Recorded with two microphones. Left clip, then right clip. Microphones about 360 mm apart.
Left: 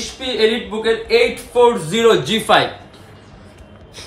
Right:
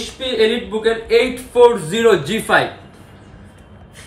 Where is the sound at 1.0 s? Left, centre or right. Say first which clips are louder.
Even; centre.